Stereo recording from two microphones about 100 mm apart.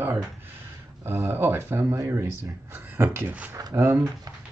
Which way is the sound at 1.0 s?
20° right (ahead or behind).